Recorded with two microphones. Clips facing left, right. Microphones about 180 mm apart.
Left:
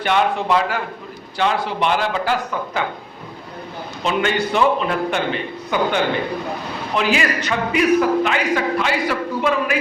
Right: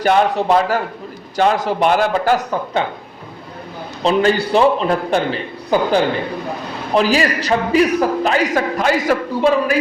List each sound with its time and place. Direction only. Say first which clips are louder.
0.0 s a man's voice: right 4 dB; 40° right (ahead or behind)
4.0 s a man's voice: right 5 dB; 35° right (ahead or behind)